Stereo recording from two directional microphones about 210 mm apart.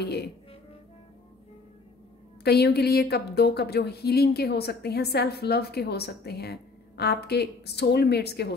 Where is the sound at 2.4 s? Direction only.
50° left (ahead or behind).